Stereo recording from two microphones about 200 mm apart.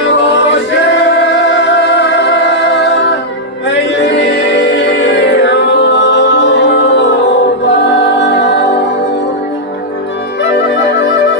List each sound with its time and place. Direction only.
1.2 s music: 60° left (ahead or behind)
10.5 s music: 60° left (ahead or behind)